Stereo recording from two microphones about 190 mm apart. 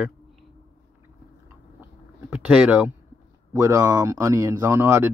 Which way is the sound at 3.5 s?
20° right (ahead or behind).